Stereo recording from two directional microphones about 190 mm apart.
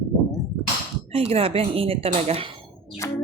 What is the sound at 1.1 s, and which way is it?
A woman's voice, 30° right (ahead or behind).